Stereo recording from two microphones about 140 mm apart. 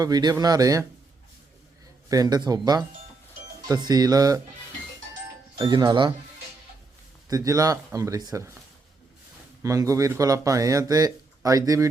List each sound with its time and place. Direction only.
0.0 s speech: 30° right (ahead or behind)
2.0 s speech: 25° right (ahead or behind)
5.5 s speech: 30° right (ahead or behind)
7.3 s speech: 25° right (ahead or behind)
9.6 s speech: 25° right (ahead or behind)